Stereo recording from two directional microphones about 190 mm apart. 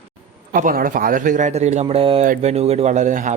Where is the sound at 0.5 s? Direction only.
45° right (ahead or behind).